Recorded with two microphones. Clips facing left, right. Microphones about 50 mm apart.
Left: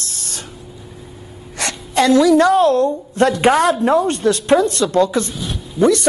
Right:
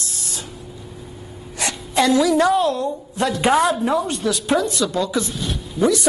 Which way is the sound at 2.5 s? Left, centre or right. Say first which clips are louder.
Left 6 dB; left.